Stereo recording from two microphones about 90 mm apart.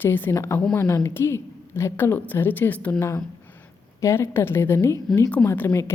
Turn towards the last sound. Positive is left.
turn(degrees=30)  # may be behind; listen again after turning